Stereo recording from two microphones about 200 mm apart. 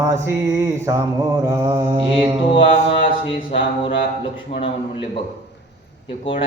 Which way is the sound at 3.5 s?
25° left (ahead or behind).